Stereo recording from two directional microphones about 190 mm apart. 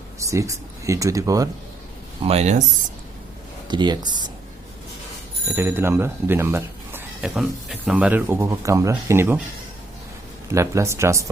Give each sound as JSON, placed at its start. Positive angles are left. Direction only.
{"t": 0.2, "sound": "speech", "side_deg": -15}
{"t": 2.2, "sound": "speech", "side_deg": -35}
{"t": 3.7, "sound": "speech", "side_deg": -25}
{"t": 5.5, "sound": "speech", "side_deg": -10}
{"t": 10.5, "sound": "speech", "side_deg": -15}